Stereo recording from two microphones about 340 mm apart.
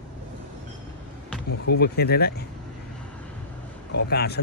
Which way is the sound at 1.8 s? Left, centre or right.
Left.